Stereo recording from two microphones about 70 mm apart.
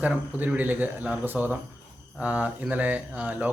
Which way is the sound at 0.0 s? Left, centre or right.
Right.